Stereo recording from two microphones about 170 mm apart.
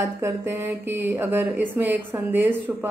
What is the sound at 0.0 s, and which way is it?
Speech, 15° right (ahead or behind).